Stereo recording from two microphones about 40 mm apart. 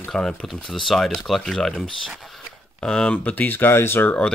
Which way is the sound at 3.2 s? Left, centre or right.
Left.